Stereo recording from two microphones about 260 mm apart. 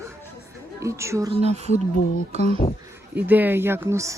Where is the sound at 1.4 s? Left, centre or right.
Right.